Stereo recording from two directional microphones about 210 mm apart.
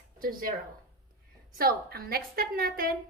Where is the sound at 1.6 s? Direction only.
45° right (ahead or behind).